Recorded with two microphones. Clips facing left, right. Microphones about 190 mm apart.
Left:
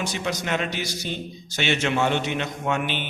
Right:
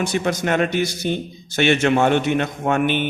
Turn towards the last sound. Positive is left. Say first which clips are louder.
# right 7 dB
turn(degrees=-50)  # may be behind; listen again after turning